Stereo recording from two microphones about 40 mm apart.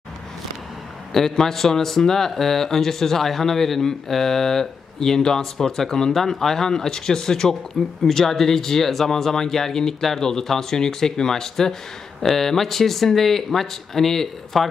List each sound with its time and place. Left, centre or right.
1.1 s speech: centre